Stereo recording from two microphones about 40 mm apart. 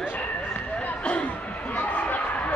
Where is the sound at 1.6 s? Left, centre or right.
Left.